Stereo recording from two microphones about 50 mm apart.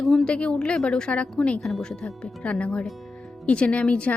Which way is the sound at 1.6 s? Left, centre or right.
Centre.